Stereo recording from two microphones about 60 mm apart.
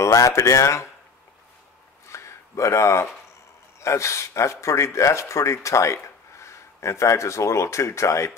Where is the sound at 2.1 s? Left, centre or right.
Left.